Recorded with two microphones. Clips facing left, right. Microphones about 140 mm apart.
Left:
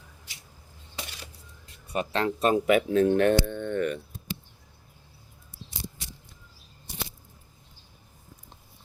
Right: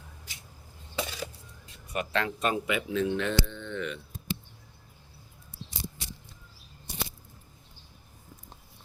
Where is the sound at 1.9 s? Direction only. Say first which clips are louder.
Left 3 dB; 30° left (ahead or behind).